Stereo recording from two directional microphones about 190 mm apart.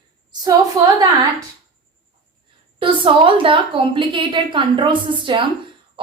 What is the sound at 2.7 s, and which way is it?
A woman's voice, 25° right (ahead or behind).